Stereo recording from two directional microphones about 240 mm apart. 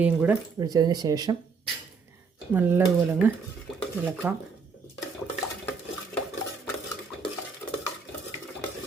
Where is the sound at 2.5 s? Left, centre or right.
Centre.